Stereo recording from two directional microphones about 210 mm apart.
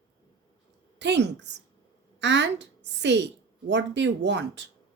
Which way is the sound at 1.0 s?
55° right (ahead or behind).